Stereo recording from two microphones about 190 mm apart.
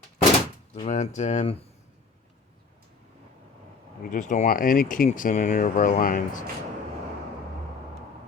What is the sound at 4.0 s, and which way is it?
Speech, 40° left (ahead or behind).